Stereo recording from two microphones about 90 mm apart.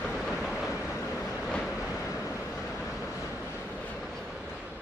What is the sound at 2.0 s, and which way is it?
Vehicle, 35° left (ahead or behind).